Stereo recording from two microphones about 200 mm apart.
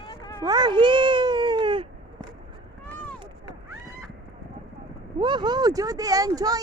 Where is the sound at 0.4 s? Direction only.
20° right (ahead or behind).